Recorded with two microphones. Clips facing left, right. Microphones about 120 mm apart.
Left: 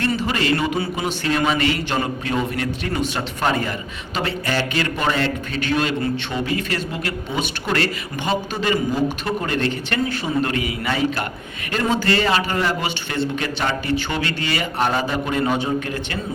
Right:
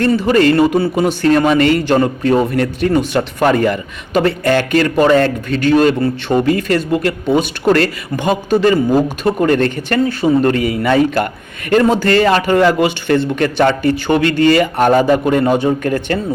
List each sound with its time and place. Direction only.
0.3 s speech: 50° right (ahead or behind)